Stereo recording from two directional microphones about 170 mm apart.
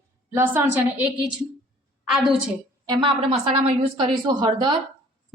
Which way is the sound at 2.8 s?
25° right (ahead or behind).